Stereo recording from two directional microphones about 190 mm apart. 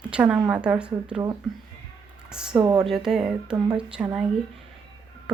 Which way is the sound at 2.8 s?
Centre (ahead or behind).